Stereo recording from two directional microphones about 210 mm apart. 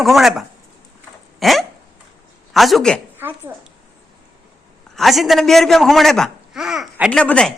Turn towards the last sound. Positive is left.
turn(degrees=5)  # may be behind; listen again after turning